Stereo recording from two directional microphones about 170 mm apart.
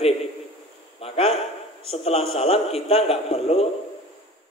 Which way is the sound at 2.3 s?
35° left (ahead or behind).